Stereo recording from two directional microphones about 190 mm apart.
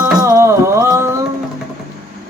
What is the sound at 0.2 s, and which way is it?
Music, 20° right (ahead or behind).